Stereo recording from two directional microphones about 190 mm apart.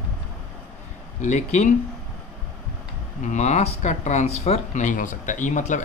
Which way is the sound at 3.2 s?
40° left (ahead or behind).